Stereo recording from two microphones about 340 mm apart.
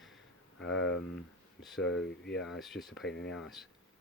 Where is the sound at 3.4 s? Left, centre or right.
Centre.